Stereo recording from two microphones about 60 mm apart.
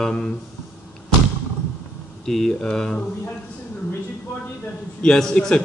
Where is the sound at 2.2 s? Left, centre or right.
Centre.